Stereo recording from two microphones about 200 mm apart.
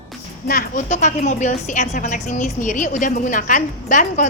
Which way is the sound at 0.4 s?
40° left (ahead or behind).